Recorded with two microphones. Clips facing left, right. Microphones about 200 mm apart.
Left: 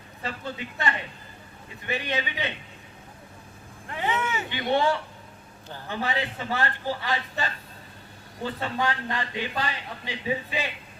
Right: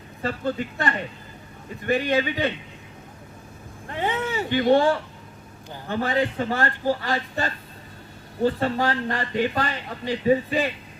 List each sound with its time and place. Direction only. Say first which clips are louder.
0.2 s speech: right 8 dB; 45° right (ahead or behind)
3.8 s speech: right 2 dB; 35° right (ahead or behind)